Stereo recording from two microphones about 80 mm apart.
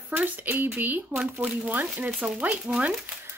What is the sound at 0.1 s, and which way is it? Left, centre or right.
A woman's voice, right.